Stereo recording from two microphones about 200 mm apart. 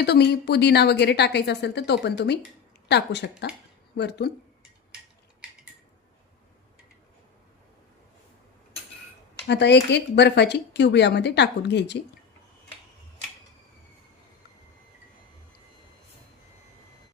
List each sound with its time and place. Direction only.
0.0 s a woman's voice: 55° left (ahead or behind)
9.5 s a woman's voice: 60° left (ahead or behind)